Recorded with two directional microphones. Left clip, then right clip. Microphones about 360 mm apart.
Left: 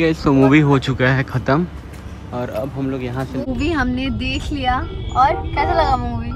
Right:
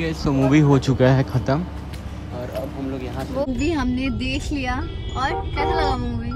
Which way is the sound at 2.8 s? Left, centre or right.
Centre.